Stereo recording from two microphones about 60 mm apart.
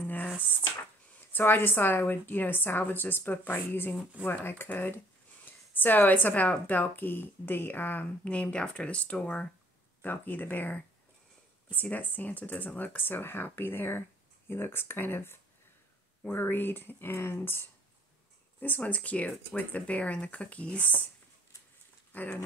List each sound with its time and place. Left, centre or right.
0.0 s a sound: left
1.3 s speech: left; by 9.5 s centre
10.0 s speech: left
18.6 s speech: left
22.1 s speech: left